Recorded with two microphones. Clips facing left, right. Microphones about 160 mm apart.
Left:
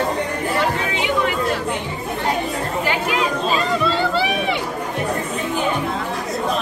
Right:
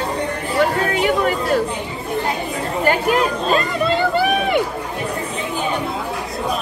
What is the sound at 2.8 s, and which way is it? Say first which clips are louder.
Speech: right 6 dB; 45° right (ahead or behind).